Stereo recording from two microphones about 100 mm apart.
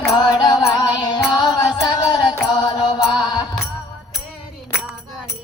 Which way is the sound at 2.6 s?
50° left (ahead or behind).